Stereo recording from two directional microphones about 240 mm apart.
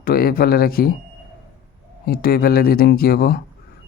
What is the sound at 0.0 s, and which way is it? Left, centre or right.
Speech, left.